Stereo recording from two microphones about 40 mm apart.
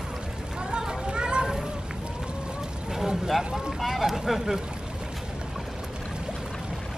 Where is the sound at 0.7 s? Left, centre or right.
Centre.